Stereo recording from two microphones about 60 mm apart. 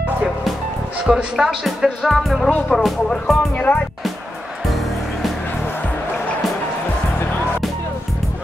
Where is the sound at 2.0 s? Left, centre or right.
Centre.